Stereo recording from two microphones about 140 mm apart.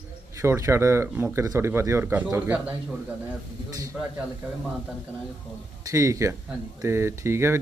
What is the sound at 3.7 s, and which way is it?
Speech, 25° right (ahead or behind).